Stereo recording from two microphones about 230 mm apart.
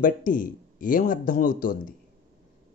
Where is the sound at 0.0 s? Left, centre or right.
Left.